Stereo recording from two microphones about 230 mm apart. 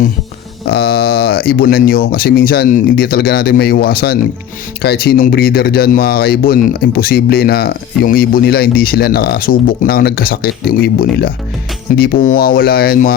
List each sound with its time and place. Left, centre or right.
0.7 s speech: left